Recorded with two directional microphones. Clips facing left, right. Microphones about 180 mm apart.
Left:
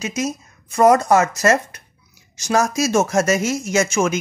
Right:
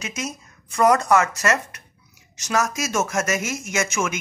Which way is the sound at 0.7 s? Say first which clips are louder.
Left 4 dB; 30° left (ahead or behind).